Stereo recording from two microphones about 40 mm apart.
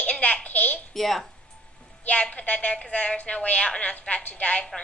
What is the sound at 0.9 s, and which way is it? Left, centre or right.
Speech, centre.